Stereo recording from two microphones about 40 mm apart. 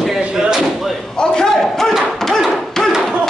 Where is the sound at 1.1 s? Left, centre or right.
Centre.